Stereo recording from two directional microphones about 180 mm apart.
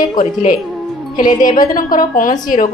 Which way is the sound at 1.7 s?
50° left (ahead or behind).